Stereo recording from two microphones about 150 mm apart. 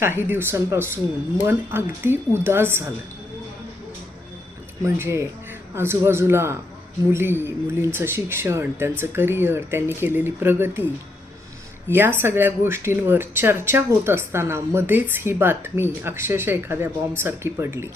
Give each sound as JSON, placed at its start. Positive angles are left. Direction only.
{"t": 0.0, "sound": "speech", "side_deg": -15}
{"t": 4.8, "sound": "speech", "side_deg": -20}
{"t": 11.9, "sound": "speech", "side_deg": -15}